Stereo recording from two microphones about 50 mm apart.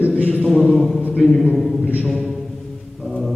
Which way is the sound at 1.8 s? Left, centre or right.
Right.